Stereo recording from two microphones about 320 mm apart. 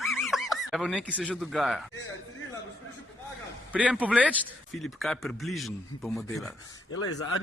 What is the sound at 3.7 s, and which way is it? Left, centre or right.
A man's voice, centre.